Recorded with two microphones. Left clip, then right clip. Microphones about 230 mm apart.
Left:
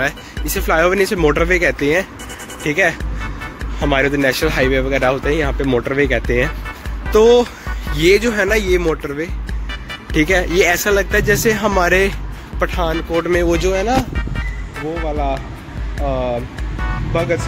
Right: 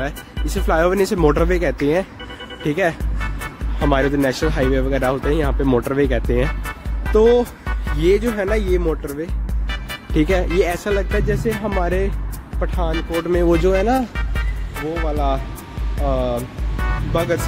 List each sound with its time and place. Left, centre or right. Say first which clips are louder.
0.7 s speech: left 3 dB; centre
10.1 s speech: left 3 dB; centre
13.5 s speech: even; right
14.1 s music: left 2 dB; centre
15.0 s speech: left 1 dB; centre